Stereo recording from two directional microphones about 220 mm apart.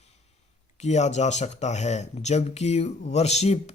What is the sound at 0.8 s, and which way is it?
Speech, 30° left (ahead or behind).